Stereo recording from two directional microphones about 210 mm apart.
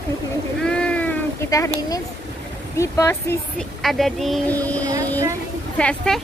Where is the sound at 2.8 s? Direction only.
15° left (ahead or behind).